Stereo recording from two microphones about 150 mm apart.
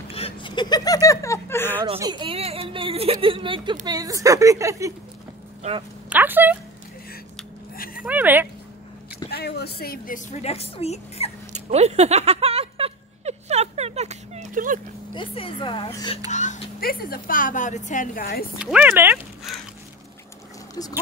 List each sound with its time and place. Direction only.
0.1 s speech: 35° left (ahead or behind); by 1.8 s 15° left (ahead or behind)
2.0 s a woman's voice: 30° right (ahead or behind)
6.0 s speech: 10° right (ahead or behind)
7.7 s a sound: 75° left (ahead or behind)
8.0 s speech: 10° right (ahead or behind)
9.3 s a woman's voice: 90° left; by 11.3 s 45° left (ahead or behind)
11.5 s a sound: 45° right (ahead or behind); by 14.8 s 60° right (ahead or behind)
15.1 s a woman's voice: 35° left (ahead or behind)
16.3 s a sound: 55° left (ahead or behind)
16.8 s a woman's voice: 80° left
18.6 s speech: 5° right (ahead or behind)